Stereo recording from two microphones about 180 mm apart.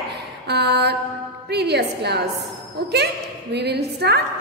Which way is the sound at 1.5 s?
65° right (ahead or behind).